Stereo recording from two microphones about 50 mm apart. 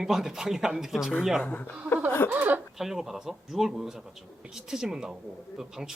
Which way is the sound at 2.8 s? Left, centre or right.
Centre.